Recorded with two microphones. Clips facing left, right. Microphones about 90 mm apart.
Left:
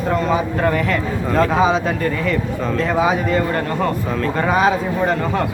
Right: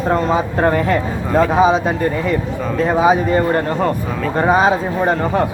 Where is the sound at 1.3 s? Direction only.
20° right (ahead or behind).